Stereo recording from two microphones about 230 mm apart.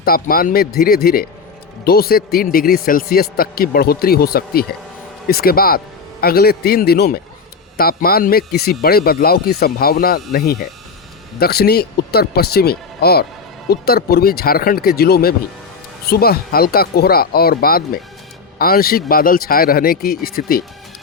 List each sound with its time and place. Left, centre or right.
0.0 s a man's voice: left